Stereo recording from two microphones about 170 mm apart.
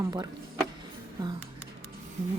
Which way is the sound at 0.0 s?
25° right (ahead or behind).